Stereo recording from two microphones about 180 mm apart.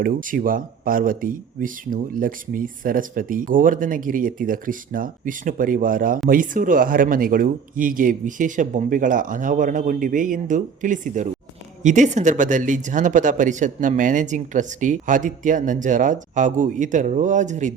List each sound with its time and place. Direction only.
0.0 s speech: 50° right (ahead or behind)